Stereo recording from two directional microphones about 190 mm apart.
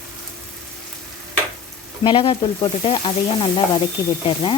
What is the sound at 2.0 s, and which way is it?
Speech, 25° left (ahead or behind).